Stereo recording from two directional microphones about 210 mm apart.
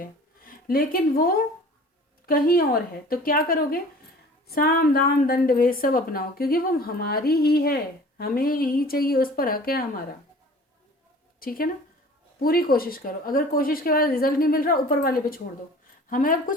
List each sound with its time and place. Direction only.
0.0 s a sound: 45° left (ahead or behind)
2.2 s a woman's voice: 45° left (ahead or behind)
11.3 s a woman's voice: 45° left (ahead or behind)